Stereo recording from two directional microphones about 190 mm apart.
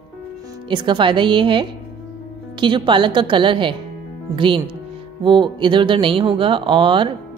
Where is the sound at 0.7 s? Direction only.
25° right (ahead or behind).